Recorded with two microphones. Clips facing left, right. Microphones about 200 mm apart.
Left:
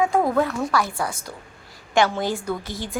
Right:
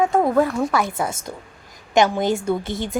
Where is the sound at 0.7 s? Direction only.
20° right (ahead or behind).